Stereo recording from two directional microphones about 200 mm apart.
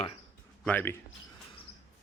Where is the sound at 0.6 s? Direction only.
10° left (ahead or behind).